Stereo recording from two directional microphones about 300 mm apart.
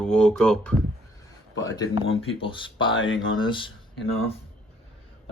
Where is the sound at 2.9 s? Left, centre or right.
Left.